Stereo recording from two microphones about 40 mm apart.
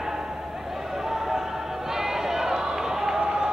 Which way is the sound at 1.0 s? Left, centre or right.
Centre.